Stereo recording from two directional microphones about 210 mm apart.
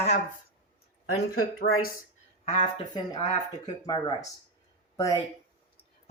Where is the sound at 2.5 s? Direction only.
25° left (ahead or behind).